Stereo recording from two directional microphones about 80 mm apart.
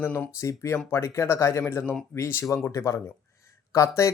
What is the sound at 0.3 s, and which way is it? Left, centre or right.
Speech, left.